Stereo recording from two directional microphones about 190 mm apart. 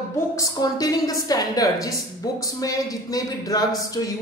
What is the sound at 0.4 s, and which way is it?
A woman's voice, 20° left (ahead or behind).